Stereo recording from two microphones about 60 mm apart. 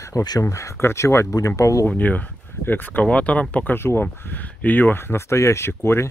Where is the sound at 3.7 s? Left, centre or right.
Left.